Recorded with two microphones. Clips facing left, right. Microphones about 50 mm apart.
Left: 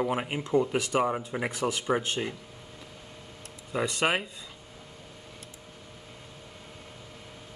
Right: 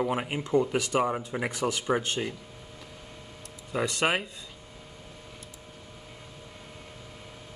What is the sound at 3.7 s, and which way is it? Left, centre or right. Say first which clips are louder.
Speech: even; centre.